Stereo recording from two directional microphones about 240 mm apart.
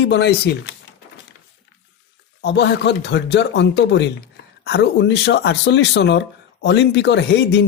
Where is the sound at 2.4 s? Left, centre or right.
Left.